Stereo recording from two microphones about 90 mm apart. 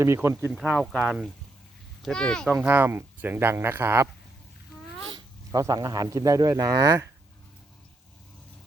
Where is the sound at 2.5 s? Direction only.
25° right (ahead or behind).